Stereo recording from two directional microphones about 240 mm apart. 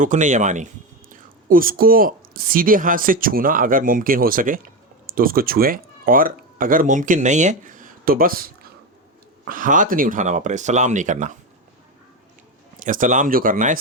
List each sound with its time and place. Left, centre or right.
0.0 s a woman's voice: right
12.8 s a woman's voice: right